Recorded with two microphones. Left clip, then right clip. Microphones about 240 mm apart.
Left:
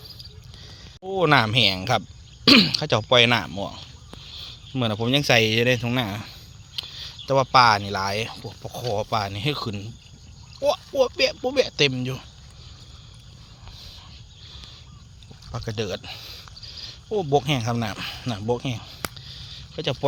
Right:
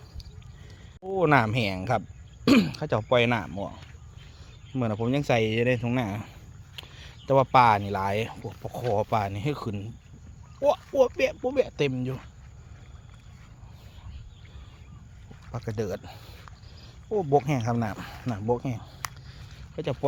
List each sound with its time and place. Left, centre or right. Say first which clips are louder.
0.6 s a man's voice: left 3 dB; centre
6.7 s a sound: left 11 dB; centre
7.5 s speech: left 5 dB; centre
10.6 s speech: left 1 dB; centre
11.3 s speech: left 3 dB; centre
15.6 s speech: left 3 dB; centre
16.6 s cricket: left 3 dB; centre
17.7 s speech: left 3 dB; centre